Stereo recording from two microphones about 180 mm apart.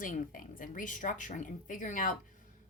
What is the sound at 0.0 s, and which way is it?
A woman's voice, 50° left (ahead or behind).